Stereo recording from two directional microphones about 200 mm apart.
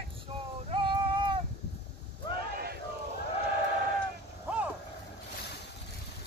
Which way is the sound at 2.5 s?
50° right (ahead or behind).